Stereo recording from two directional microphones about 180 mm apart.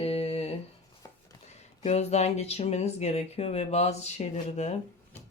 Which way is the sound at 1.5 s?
35° left (ahead or behind).